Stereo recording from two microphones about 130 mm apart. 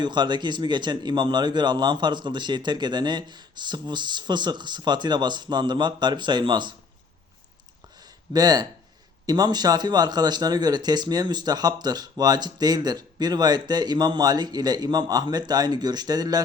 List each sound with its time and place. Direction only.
0.0 s speech: 35° right (ahead or behind)
8.3 s speech: 30° right (ahead or behind)